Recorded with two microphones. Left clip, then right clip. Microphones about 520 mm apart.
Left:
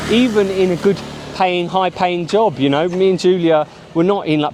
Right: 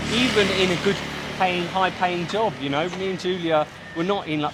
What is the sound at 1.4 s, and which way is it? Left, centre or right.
Speech, left.